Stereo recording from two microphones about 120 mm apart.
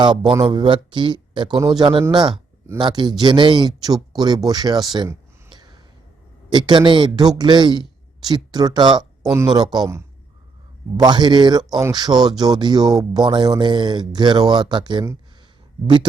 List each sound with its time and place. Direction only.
0.0 s a man's voice: 40° right (ahead or behind)
6.5 s a man's voice: 40° right (ahead or behind)